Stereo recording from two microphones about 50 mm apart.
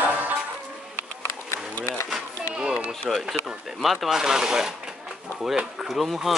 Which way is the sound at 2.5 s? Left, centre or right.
Centre.